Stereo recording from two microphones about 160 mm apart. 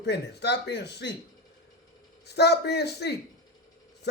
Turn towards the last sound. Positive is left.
turn(degrees=90)